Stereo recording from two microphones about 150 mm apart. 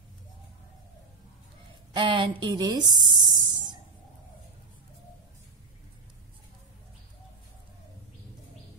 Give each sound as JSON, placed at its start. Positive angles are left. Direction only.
{"t": 2.0, "sound": "speech", "side_deg": -35}